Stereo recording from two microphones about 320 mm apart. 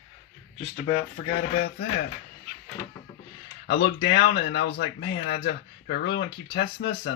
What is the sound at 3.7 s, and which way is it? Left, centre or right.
Speech, left.